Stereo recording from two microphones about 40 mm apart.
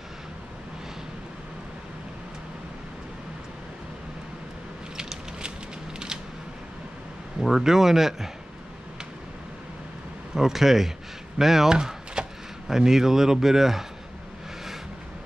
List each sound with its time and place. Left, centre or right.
4.9 s a sound: centre
7.3 s speech: centre
10.3 s speech: centre